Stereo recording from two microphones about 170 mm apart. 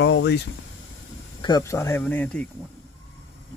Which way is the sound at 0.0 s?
90° left.